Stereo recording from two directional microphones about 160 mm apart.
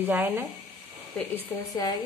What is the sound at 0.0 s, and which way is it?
Speech, 10° right (ahead or behind).